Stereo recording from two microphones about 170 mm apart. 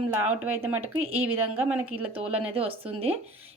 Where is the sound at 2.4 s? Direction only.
35° right (ahead or behind).